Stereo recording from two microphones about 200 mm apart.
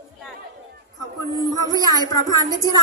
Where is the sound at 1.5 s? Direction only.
20° right (ahead or behind).